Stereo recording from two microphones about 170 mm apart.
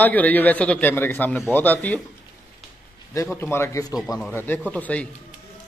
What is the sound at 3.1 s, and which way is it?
Speech, 15° left (ahead or behind).